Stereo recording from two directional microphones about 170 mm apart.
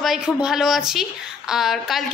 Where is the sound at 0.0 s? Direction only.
Centre (ahead or behind).